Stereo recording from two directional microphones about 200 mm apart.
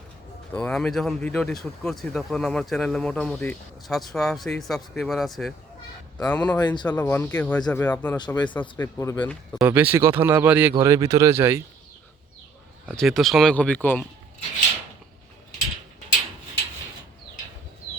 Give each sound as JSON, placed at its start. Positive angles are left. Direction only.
{"t": 0.5, "sound": "speech", "side_deg": 5}
{"t": 6.6, "sound": "speech", "side_deg": 20}
{"t": 6.8, "sound": "speech", "side_deg": 10}
{"t": 8.1, "sound": "speech", "side_deg": 20}
{"t": 9.6, "sound": "speech", "side_deg": -10}
{"t": 12.8, "sound": "speech", "side_deg": 0}